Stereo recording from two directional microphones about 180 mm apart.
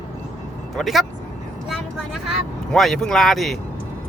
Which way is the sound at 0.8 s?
Centre (ahead or behind).